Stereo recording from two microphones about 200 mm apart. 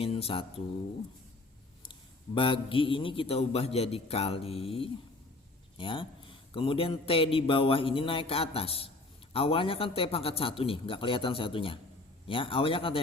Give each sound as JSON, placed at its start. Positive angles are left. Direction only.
{"t": 0.0, "sound": "speech", "side_deg": 30}
{"t": 1.9, "sound": "a man's voice", "side_deg": 25}